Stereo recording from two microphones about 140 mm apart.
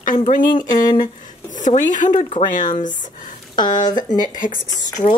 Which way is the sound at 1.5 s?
65° left (ahead or behind).